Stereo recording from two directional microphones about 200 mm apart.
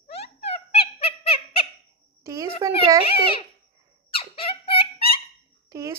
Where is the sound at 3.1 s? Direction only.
25° left (ahead or behind).